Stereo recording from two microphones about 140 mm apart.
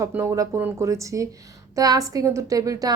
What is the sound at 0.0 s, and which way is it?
A woman's voice, 25° right (ahead or behind).